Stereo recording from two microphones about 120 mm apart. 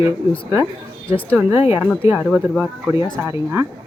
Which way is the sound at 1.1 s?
50° left (ahead or behind).